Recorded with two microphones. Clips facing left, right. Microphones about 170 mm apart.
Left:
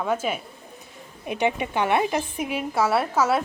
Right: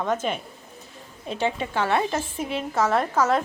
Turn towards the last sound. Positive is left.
turn(degrees=10)  # may be behind; listen again after turning